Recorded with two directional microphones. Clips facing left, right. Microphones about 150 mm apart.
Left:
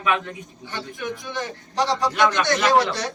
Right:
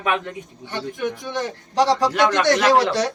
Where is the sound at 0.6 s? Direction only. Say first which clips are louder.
Right 5 dB; 65° right (ahead or behind).